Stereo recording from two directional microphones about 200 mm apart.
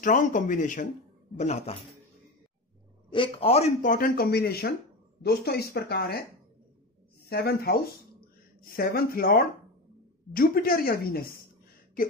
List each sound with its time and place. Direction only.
0.0 s speech: 40° left (ahead or behind)
3.1 s a man's voice: 25° left (ahead or behind); by 6.2 s 55° left (ahead or behind)
7.2 s a man's voice: 50° left (ahead or behind)